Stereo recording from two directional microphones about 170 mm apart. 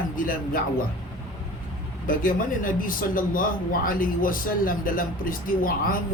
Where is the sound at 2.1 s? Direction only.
55° left (ahead or behind).